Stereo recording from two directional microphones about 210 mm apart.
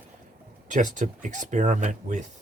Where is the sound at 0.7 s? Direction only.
35° right (ahead or behind).